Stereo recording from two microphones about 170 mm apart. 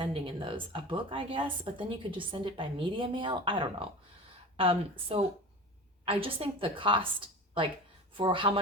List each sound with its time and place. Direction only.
0.0 s a woman's voice: 30° right (ahead or behind)
8.1 s speech: 30° right (ahead or behind)